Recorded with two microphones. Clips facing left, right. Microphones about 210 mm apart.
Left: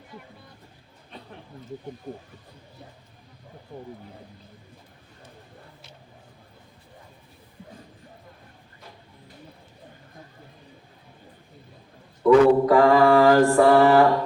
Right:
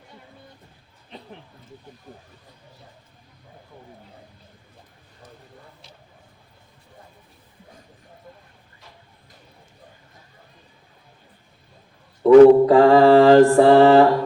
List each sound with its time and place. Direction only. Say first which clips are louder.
12.2 s mantra: right 7 dB; 30° right (ahead or behind)